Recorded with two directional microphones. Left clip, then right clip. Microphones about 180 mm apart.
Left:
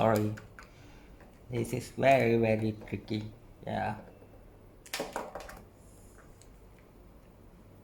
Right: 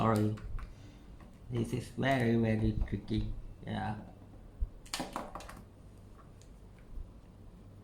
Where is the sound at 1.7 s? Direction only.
30° left (ahead or behind).